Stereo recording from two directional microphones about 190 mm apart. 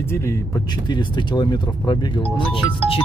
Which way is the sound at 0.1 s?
15° left (ahead or behind).